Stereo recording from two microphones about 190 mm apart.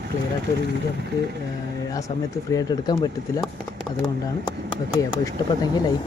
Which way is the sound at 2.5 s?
20° left (ahead or behind).